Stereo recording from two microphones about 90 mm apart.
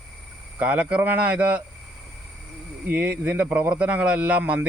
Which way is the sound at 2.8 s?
20° right (ahead or behind).